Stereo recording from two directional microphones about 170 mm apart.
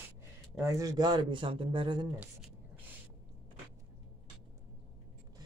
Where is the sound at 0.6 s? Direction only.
20° right (ahead or behind).